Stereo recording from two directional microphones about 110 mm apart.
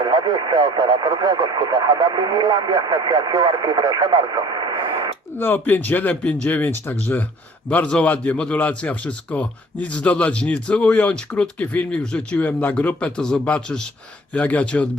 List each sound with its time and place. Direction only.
0.0 s speech: 40° right (ahead or behind)
5.4 s a man's voice: 20° left (ahead or behind)